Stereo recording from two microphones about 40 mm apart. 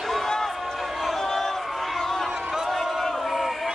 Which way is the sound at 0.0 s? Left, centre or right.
Centre.